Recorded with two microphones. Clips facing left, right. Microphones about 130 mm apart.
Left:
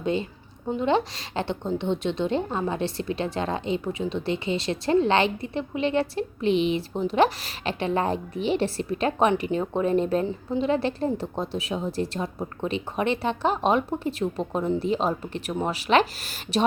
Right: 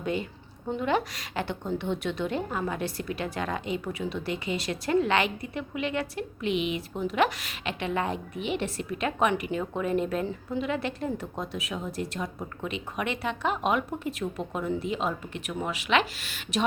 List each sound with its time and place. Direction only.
0.0 s a woman's voice: 25° left (ahead or behind)